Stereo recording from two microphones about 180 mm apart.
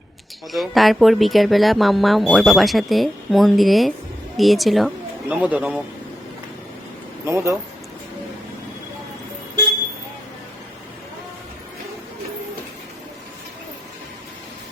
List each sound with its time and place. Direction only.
0.5 s speech: centre (ahead or behind)
7.3 s speech: 15° right (ahead or behind)